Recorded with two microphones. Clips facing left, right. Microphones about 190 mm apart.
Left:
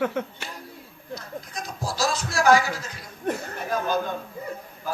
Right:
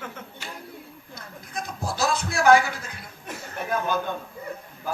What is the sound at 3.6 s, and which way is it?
Speech, 55° right (ahead or behind).